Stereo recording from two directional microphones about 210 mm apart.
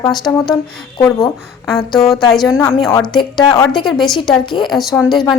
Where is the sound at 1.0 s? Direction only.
15° left (ahead or behind).